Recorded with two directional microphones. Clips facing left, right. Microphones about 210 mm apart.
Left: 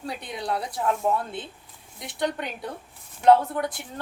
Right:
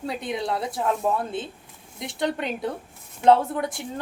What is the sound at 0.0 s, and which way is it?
Speech, 25° right (ahead or behind).